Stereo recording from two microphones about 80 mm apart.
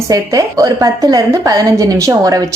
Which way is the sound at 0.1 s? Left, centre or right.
Right.